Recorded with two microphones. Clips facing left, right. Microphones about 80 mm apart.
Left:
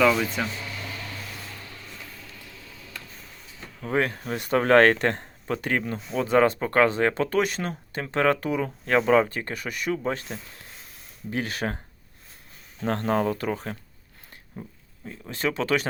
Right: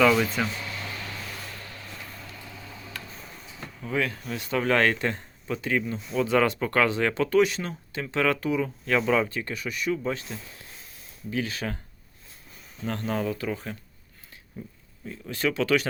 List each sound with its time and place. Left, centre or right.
0.4 s speech: centre
3.8 s speech: left
6.1 s speech: left
12.8 s speech: left
15.1 s speech: left